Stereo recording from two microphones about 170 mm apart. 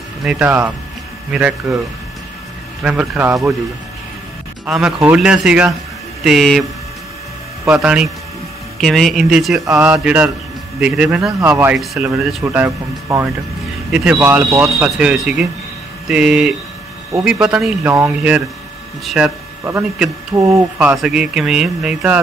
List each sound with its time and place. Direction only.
0.2 s a man's voice: 5° right (ahead or behind)
2.8 s speech: 5° right (ahead or behind)
4.6 s a man's voice: 5° right (ahead or behind)
7.8 s a man's voice: 5° right (ahead or behind)
20.3 s speech: 15° right (ahead or behind)
21.0 s a man's voice: 5° right (ahead or behind)